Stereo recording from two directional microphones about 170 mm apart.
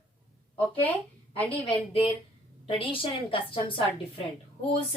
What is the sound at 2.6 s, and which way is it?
A woman's voice, 30° left (ahead or behind).